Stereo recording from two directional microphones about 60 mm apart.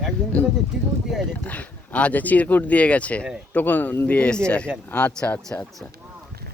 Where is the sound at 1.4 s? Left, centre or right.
Left.